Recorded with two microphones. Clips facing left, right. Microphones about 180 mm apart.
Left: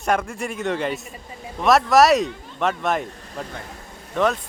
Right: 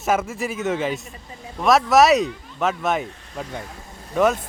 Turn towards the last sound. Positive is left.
turn(degrees=-5)  # may be behind; listen again after turning